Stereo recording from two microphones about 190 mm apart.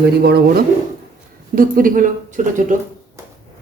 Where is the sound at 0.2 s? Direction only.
55° right (ahead or behind).